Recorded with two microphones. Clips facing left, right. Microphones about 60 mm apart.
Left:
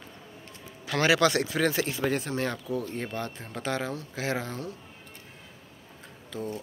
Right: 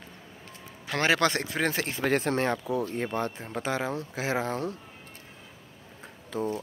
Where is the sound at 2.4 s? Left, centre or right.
Right.